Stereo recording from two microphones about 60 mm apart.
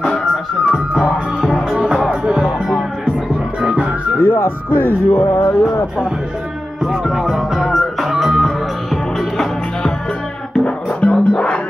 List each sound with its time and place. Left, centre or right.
1.7 s music: centre
4.2 s music: left
5.2 s a sound: left
6.8 s music: centre